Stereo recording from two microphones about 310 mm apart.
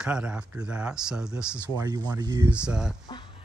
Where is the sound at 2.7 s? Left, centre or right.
Centre.